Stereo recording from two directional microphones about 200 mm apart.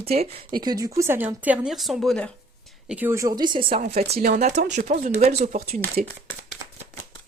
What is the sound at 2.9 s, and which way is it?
Speech, 10° right (ahead or behind).